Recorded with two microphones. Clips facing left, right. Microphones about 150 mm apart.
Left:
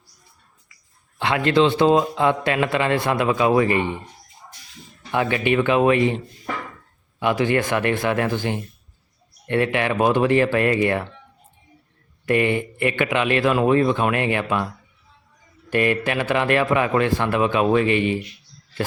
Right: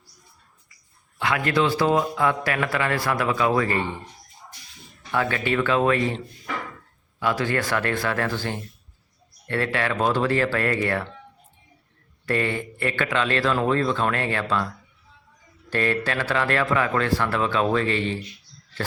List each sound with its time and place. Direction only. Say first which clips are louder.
1.2 s a man's voice: left 4 dB; 25° left (ahead or behind)
5.1 s a man's voice: left 4 dB; 20° left (ahead or behind)
7.2 s a man's voice: left 4 dB; 20° left (ahead or behind)
12.2 s a man's voice: left 5 dB; 15° left (ahead or behind)
15.7 s a man's voice: left 4 dB; 15° left (ahead or behind)